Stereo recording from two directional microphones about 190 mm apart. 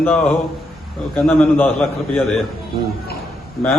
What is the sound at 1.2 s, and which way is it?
A man's voice, 5° left (ahead or behind).